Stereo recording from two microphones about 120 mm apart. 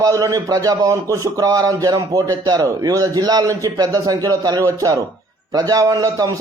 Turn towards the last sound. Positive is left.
turn(degrees=-30)  # may be behind; listen again after turning